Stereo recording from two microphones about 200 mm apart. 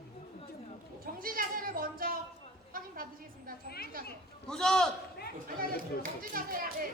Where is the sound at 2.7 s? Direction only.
45° right (ahead or behind).